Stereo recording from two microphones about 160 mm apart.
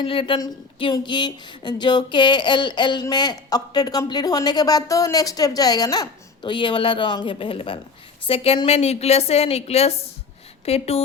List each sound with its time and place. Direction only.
0.0 s a woman's voice: 35° left (ahead or behind)